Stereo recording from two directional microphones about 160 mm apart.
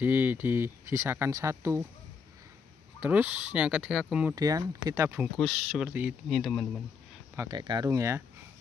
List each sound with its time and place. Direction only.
0.0 s speech: 10° right (ahead or behind)
3.0 s speech: 10° right (ahead or behind)
4.4 s speech: 20° right (ahead or behind)
5.4 s speech: centre (ahead or behind)
6.2 s speech: centre (ahead or behind)
7.3 s speech: 25° right (ahead or behind)